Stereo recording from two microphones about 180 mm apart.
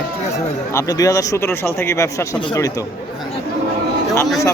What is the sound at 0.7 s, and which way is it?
A man's voice, 20° left (ahead or behind).